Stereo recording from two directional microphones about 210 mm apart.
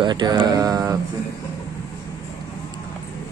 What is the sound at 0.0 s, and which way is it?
Speech, 20° right (ahead or behind).